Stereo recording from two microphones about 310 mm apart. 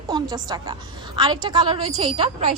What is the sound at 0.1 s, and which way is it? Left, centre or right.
A woman's voice, centre.